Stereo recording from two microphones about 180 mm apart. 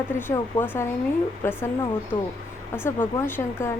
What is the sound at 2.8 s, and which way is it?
Speech, 10° left (ahead or behind).